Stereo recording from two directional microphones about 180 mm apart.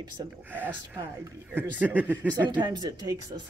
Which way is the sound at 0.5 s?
10° right (ahead or behind).